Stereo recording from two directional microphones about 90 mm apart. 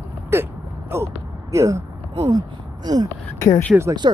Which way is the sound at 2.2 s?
50° right (ahead or behind).